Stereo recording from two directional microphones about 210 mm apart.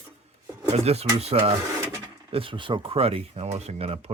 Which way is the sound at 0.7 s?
30° right (ahead or behind).